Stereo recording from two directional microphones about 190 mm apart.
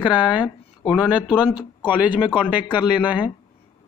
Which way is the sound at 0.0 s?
25° left (ahead or behind).